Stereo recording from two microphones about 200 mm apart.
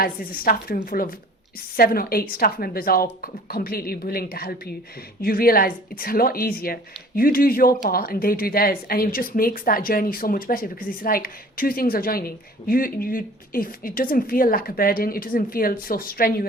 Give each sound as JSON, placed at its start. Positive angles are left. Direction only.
{"t": 0.0, "sound": "speech", "side_deg": 45}